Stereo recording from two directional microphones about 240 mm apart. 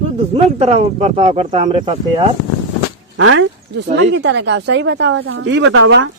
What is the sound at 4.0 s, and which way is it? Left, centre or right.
Speech, right.